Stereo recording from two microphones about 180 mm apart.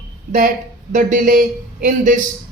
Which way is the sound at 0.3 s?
50° right (ahead or behind).